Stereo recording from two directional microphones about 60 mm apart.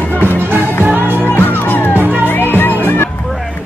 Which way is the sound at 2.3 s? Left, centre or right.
Left.